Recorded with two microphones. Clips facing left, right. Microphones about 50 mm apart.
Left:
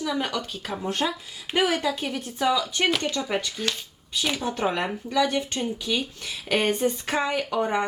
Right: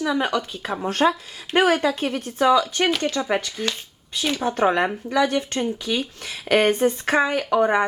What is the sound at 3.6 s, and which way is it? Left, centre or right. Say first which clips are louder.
Speech: right 2 dB; right.